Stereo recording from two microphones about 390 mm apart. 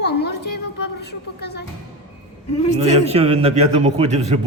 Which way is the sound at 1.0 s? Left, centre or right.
Left.